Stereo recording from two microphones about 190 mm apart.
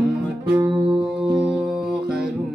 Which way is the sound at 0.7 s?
25° right (ahead or behind).